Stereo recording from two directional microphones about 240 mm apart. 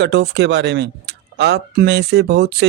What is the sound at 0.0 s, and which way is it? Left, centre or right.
Speech, right.